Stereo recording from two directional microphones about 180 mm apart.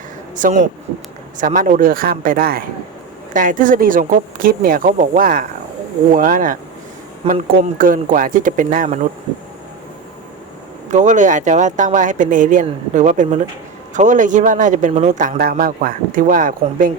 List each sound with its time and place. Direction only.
0.3 s a man's voice: 45° right (ahead or behind)
10.9 s a man's voice: 40° right (ahead or behind)